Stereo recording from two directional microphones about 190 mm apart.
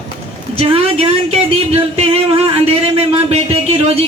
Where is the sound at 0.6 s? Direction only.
30° right (ahead or behind).